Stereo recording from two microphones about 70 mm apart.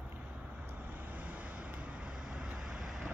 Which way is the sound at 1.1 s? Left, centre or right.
Right.